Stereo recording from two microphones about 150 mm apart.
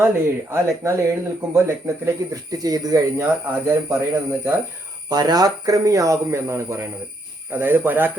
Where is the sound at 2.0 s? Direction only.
25° right (ahead or behind).